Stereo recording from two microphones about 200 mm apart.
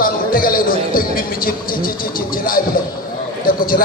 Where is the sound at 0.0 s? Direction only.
45° left (ahead or behind).